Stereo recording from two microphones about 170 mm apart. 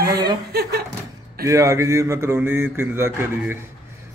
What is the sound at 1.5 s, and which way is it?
A man's voice, 20° right (ahead or behind).